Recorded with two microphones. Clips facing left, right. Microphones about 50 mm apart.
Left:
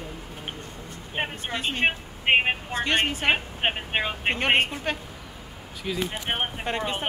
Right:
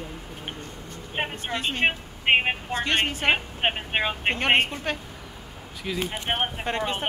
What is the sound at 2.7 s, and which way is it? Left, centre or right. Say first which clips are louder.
Speech: even; centre.